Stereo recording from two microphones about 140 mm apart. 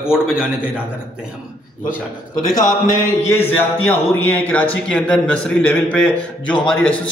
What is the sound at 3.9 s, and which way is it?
Speech, 15° left (ahead or behind).